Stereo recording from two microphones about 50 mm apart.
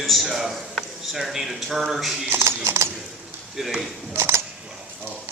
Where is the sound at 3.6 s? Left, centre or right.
Centre.